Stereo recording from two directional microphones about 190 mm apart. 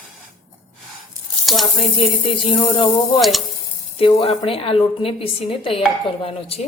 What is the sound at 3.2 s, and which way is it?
Speech, centre (ahead or behind).